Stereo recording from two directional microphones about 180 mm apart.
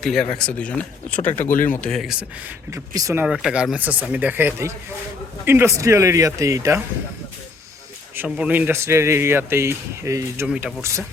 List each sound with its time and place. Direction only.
0.0 s speech: centre (ahead or behind)
2.6 s speech: 20° right (ahead or behind)
3.2 s speech: 5° right (ahead or behind)
8.1 s speech: 10° right (ahead or behind)